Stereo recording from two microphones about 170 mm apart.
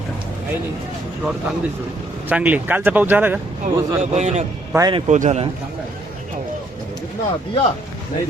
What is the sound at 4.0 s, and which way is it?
Speech, 40° right (ahead or behind).